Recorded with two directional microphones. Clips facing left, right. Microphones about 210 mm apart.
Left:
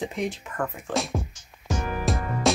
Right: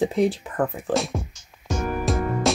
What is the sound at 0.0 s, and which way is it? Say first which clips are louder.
Speech: right 8 dB; 35° right (ahead or behind).